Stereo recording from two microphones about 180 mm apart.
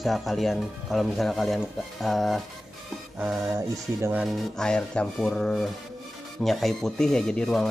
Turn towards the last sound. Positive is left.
turn(degrees=5)  # may be behind; listen again after turning